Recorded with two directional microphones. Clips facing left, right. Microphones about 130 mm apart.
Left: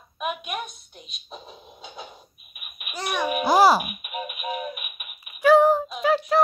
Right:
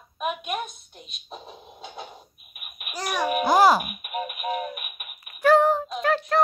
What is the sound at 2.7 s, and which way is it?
Babbling, 40° right (ahead or behind).